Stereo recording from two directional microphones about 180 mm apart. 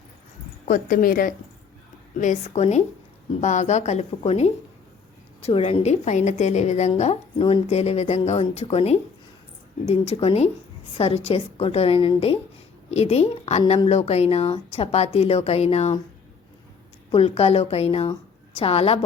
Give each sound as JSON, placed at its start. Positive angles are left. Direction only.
{"t": 0.6, "sound": "a woman's voice", "side_deg": 50}
{"t": 17.1, "sound": "a woman's voice", "side_deg": 35}